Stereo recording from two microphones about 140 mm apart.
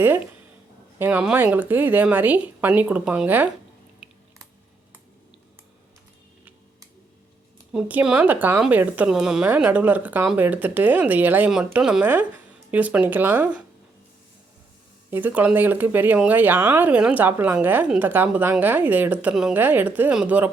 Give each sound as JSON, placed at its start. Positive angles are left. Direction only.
{"t": 0.9, "sound": "speech", "side_deg": -15}
{"t": 4.0, "sound": "a sound", "side_deg": -5}
{"t": 7.7, "sound": "speech", "side_deg": -10}
{"t": 15.1, "sound": "speech", "side_deg": -10}